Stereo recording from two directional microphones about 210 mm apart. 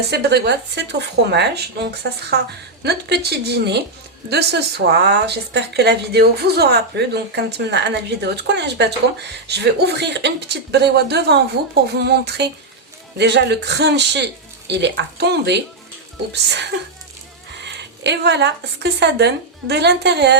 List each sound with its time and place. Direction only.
0.1 s speech: 50° right (ahead or behind)